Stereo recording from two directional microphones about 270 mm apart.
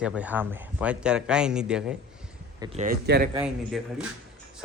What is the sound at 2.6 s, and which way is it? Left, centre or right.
Speech, right.